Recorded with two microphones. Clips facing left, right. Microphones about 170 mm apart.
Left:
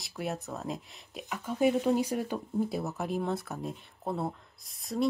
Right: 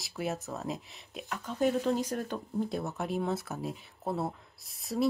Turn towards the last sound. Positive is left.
turn(degrees=0)  # may be behind; listen again after turning